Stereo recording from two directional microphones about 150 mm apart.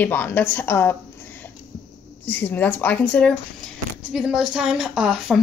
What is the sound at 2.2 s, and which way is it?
Speech, 15° left (ahead or behind).